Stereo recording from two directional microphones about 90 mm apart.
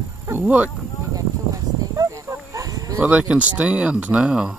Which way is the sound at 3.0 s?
15° right (ahead or behind).